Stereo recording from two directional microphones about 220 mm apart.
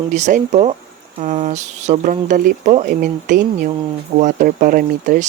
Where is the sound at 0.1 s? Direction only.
35° right (ahead or behind).